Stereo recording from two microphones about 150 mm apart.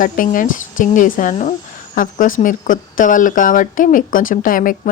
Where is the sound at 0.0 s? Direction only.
65° left (ahead or behind).